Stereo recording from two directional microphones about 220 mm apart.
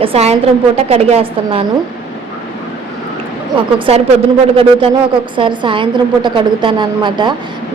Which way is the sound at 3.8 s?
25° right (ahead or behind).